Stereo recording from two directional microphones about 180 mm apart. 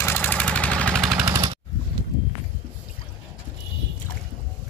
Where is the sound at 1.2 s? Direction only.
20° right (ahead or behind).